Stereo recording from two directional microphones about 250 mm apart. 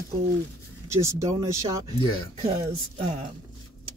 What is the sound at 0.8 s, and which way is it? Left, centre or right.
Speech, centre.